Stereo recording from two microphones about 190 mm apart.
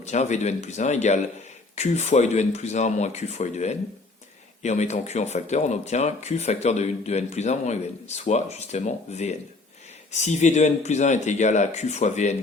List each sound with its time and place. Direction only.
0.0 s speech: 35° left (ahead or behind)